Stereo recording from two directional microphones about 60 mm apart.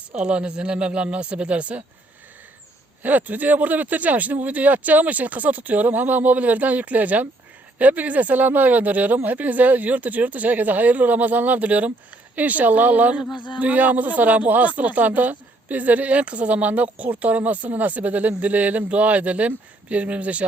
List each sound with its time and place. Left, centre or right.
0.1 s speech: centre
3.0 s speech: right